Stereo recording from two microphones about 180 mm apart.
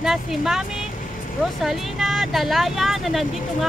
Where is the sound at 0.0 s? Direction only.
Centre (ahead or behind).